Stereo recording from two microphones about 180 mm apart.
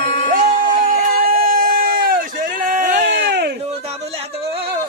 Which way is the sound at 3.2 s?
70° right (ahead or behind).